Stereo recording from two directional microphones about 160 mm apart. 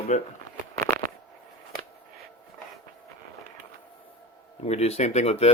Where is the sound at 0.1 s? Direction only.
45° left (ahead or behind).